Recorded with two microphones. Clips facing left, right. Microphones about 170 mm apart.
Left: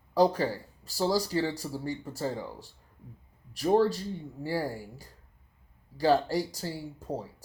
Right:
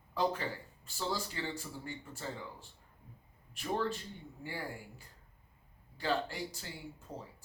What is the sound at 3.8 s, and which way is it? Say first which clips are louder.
Speech: left 11 dB; 35° left (ahead or behind).